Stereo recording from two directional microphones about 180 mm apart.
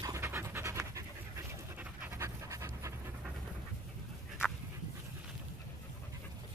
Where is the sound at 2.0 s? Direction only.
15° right (ahead or behind).